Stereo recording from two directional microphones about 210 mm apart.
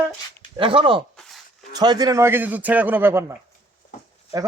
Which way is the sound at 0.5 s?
25° right (ahead or behind).